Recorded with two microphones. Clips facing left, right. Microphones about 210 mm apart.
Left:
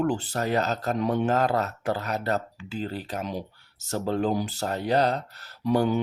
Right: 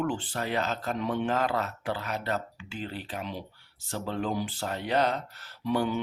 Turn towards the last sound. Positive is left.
turn(degrees=40)  # may be behind; listen again after turning